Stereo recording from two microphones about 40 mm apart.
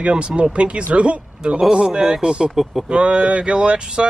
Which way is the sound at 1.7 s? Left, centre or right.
Centre.